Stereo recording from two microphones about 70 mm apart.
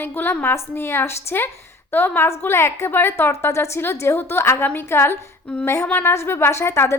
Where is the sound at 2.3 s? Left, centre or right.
Left.